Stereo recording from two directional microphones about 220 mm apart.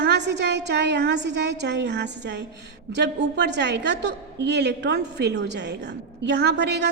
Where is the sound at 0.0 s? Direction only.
50° right (ahead or behind).